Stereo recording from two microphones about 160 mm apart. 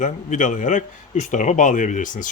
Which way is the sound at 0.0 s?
50° left (ahead or behind).